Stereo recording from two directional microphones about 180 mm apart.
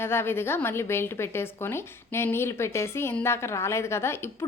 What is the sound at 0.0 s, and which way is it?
A woman's voice, 15° left (ahead or behind).